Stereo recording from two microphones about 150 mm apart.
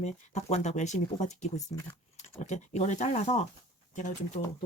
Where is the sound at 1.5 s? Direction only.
20° left (ahead or behind).